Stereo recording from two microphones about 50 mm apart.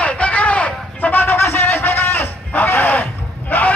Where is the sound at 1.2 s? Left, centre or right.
Left.